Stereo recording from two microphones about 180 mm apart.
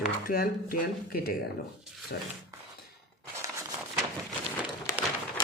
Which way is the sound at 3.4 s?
15° right (ahead or behind).